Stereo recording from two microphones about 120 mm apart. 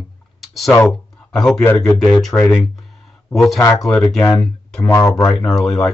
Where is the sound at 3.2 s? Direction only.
Centre (ahead or behind).